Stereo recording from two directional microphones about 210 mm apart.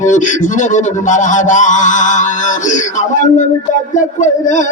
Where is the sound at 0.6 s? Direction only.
35° left (ahead or behind).